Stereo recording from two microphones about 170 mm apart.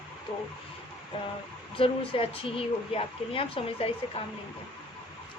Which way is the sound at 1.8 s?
30° left (ahead or behind).